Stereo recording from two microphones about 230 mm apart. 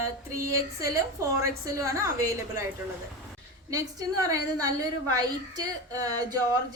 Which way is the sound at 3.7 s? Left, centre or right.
Centre.